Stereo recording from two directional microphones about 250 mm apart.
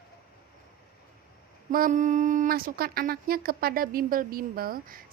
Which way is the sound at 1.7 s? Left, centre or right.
Right.